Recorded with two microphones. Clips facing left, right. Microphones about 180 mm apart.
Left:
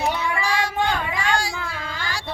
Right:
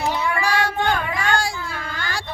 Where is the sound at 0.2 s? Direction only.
60° right (ahead or behind).